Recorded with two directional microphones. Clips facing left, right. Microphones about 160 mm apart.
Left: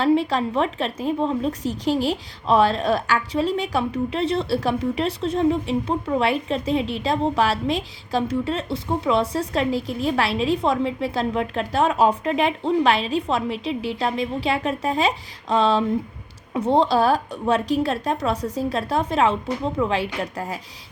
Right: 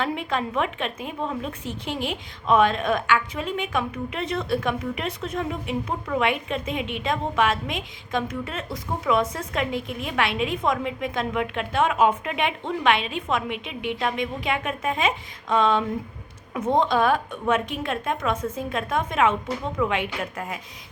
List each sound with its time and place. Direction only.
0.0 s a woman's voice: 35° left (ahead or behind)